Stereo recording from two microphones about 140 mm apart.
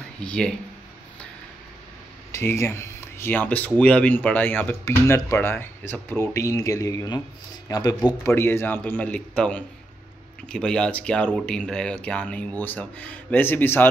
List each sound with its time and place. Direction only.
0.2 s speech: 5° left (ahead or behind)
2.3 s speech: 20° left (ahead or behind)
8.3 s speech: 15° left (ahead or behind)